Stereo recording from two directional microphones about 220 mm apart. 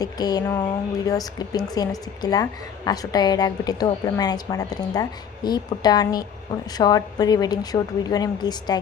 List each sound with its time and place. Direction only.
0.0 s a woman's voice: 15° left (ahead or behind)